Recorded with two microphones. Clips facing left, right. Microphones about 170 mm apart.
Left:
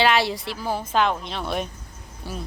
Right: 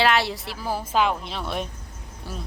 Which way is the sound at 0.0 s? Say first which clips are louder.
Left 1 dB; centre (ahead or behind).